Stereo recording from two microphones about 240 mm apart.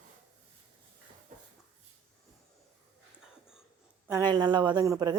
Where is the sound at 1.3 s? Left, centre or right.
Right.